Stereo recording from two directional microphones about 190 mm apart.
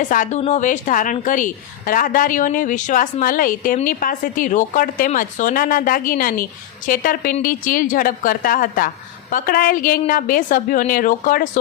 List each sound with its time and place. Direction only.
0.1 s a woman's voice: 40° left (ahead or behind)